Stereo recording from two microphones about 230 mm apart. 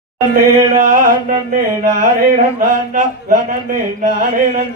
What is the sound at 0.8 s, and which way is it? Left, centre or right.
Music, right.